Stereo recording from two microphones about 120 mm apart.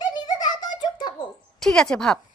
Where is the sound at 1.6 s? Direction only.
5° left (ahead or behind).